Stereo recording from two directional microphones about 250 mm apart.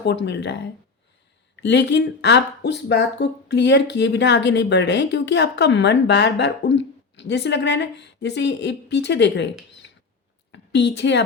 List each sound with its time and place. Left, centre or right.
0.0 s a woman's voice: left